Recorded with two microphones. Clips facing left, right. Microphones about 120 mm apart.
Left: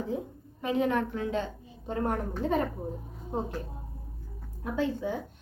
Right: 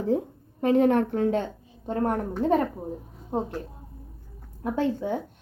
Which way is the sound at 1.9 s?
45° right (ahead or behind).